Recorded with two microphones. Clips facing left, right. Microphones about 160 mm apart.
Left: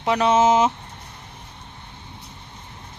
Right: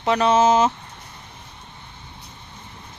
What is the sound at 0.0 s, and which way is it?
Speech, 10° left (ahead or behind).